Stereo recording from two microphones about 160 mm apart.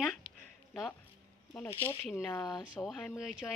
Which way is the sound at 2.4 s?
25° left (ahead or behind).